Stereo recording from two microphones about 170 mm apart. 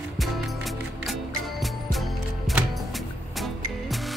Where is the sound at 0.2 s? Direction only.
Centre (ahead or behind).